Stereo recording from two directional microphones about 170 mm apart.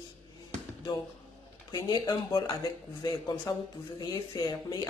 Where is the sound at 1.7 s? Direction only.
20° left (ahead or behind).